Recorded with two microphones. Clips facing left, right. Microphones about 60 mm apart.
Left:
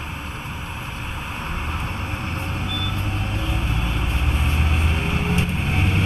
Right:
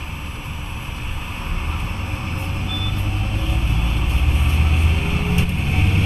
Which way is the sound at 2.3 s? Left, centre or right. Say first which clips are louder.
Even; centre.